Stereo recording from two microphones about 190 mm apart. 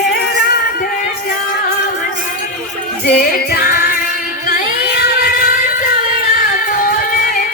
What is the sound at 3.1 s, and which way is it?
Music, 50° left (ahead or behind).